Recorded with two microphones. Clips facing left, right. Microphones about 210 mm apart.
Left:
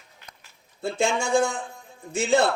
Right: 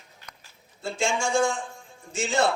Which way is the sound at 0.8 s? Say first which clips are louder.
Left 2 dB; 60° left (ahead or behind).